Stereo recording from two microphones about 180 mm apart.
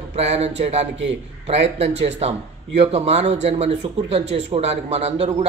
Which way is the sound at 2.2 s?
35° right (ahead or behind).